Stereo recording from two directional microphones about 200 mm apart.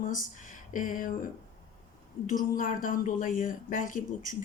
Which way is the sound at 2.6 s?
40° left (ahead or behind).